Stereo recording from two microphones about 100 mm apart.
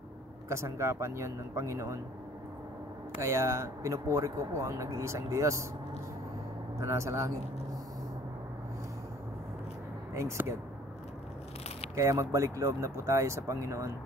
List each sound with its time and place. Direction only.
0.5 s speech: 30° right (ahead or behind)
3.2 s speech: 30° right (ahead or behind)
6.8 s speech: 30° right (ahead or behind)
10.1 s speech: 30° right (ahead or behind)
11.9 s speech: 30° right (ahead or behind)